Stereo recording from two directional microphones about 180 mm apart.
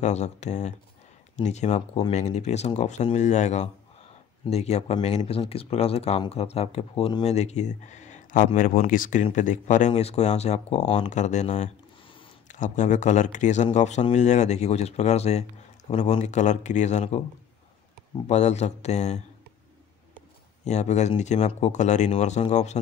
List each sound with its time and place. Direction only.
0.0 s speech: 40° left (ahead or behind)
18.2 s speech: 40° left (ahead or behind)
20.6 s speech: 40° left (ahead or behind)